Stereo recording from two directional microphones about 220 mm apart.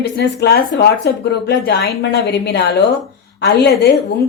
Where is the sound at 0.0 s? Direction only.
45° left (ahead or behind).